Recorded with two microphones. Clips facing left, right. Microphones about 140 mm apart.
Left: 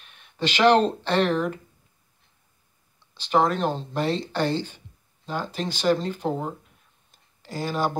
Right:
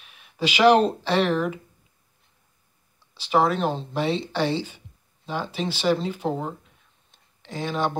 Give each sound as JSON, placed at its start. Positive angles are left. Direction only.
{"t": 0.0, "sound": "speech", "side_deg": -5}
{"t": 3.2, "sound": "speech", "side_deg": -5}
{"t": 7.1, "sound": "a sound", "side_deg": 0}